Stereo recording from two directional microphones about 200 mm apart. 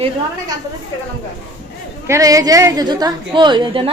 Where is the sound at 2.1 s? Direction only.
15° right (ahead or behind).